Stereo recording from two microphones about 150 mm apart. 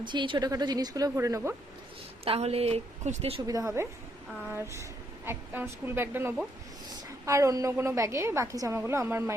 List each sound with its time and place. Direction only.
0.0 s a woman's voice: 30° right (ahead or behind)
2.2 s a woman's voice: 40° right (ahead or behind)
3.4 s a woman's voice: 20° right (ahead or behind)